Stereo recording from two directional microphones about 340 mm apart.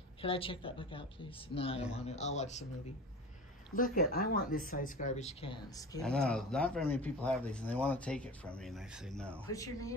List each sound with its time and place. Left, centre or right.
0.2 s speech: centre
3.7 s speech: left
6.0 s speech: centre